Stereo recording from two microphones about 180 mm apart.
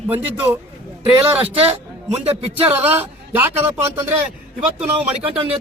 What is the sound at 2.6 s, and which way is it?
Speech, 10° right (ahead or behind).